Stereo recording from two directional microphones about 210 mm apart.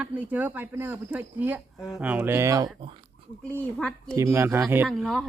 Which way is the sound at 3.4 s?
5° left (ahead or behind).